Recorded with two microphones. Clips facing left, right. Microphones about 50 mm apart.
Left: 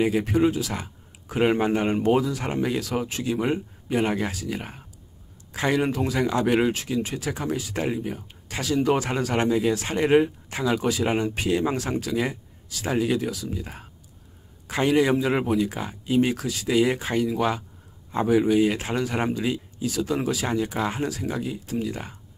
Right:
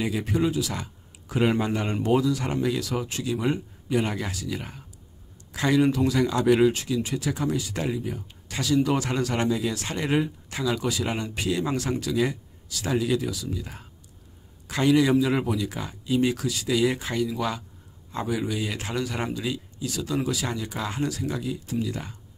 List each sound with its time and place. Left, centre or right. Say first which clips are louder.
0.3 s speech: left 3 dB; left
8.0 s speech: left 1 dB; left
8.5 s speech: left 1 dB; centre